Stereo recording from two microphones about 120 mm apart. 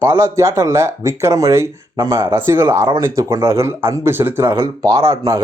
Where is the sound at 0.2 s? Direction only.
25° right (ahead or behind).